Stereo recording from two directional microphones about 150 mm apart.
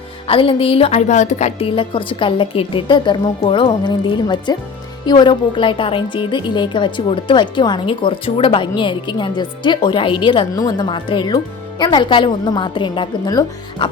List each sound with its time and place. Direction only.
0.3 s a woman's voice: 40° left (ahead or behind)